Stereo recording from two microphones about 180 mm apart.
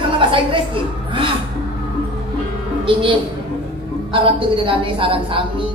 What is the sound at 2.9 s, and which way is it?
A woman's voice, 30° right (ahead or behind).